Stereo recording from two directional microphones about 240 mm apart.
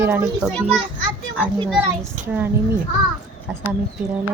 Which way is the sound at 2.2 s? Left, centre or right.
Right.